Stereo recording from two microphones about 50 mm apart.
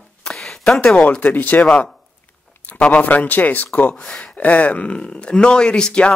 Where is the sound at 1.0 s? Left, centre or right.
Left.